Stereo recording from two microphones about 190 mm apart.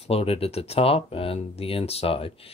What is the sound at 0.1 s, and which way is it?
Speech, 30° left (ahead or behind).